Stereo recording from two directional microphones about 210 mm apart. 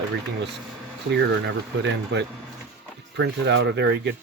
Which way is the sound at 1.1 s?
55° right (ahead or behind).